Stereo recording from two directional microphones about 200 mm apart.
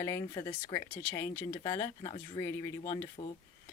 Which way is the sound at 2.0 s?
25° left (ahead or behind).